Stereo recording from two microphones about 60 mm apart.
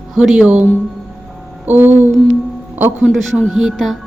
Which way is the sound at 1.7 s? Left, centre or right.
Right.